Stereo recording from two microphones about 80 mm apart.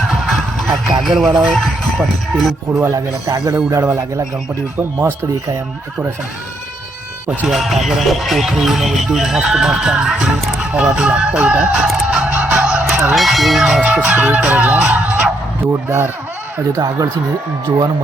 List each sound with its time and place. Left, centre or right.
0.1 s music: centre
1.0 s speech: centre
2.7 s speech: right
4.8 s speech: right
7.3 s speech: centre
10.9 s music: centre
12.5 s fowl: centre
13.1 s music: centre
15.6 s speech: right
16.7 s speech: right